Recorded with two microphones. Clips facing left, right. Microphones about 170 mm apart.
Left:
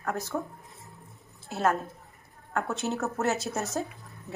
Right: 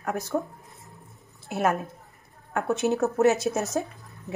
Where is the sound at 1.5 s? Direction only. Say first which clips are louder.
Right 2 dB; 15° right (ahead or behind).